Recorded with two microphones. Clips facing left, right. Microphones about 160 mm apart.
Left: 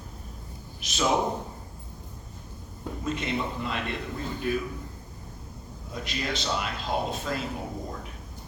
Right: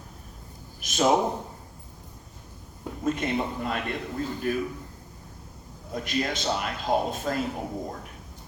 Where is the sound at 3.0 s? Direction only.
50° right (ahead or behind).